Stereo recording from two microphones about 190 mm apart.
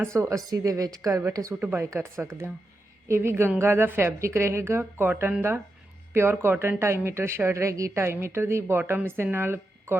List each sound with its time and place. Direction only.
0.0 s a woman's voice: 15° right (ahead or behind)